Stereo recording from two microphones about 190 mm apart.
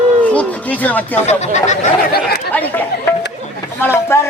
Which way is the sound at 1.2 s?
35° left (ahead or behind).